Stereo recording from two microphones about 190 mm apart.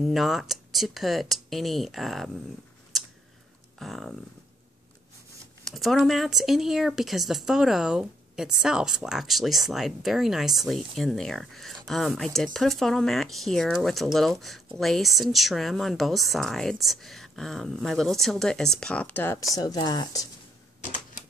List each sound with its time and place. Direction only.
0.0 s speech: centre (ahead or behind)
3.8 s speech: centre (ahead or behind)
5.6 s speech: centre (ahead or behind); by 20.2 s 20° left (ahead or behind)